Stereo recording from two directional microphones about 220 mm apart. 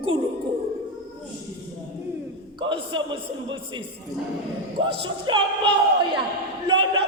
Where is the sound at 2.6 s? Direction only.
20° right (ahead or behind).